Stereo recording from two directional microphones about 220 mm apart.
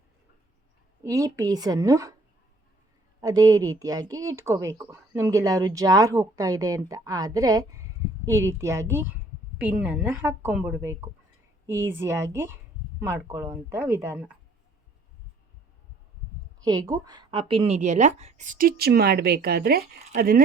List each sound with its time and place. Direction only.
1.0 s speech: 15° right (ahead or behind)
3.2 s speech: 15° right (ahead or behind)
16.6 s speech: 15° right (ahead or behind); by 20.4 s 40° right (ahead or behind)